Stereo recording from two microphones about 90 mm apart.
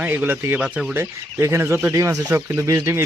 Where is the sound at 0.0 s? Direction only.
20° right (ahead or behind).